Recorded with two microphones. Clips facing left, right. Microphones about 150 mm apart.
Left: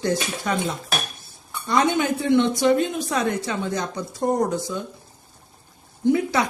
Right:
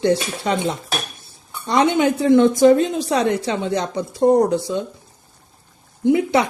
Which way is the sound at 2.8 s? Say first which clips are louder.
Right 4 dB; 30° right (ahead or behind).